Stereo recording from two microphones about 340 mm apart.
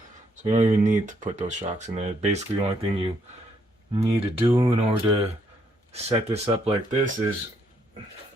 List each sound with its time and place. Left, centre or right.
0.4 s speech: right